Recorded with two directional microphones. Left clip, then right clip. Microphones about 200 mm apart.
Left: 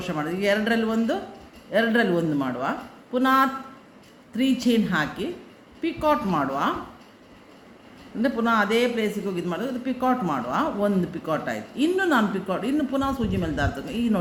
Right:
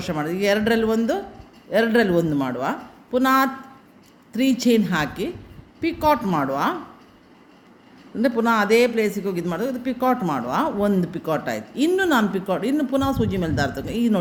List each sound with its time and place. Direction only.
0.0 s a man's voice: 45° right (ahead or behind)
8.2 s a man's voice: 45° right (ahead or behind)